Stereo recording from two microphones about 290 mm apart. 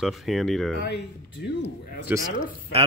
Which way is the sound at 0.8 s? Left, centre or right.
Left.